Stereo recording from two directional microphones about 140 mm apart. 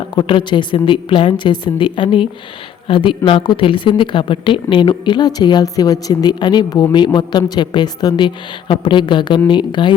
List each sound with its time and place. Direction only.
0.2 s a woman's voice: 35° left (ahead or behind)